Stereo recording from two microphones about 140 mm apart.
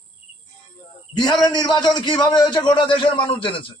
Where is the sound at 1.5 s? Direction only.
30° left (ahead or behind).